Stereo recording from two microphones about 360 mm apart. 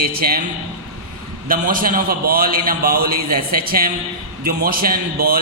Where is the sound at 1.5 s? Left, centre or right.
Right.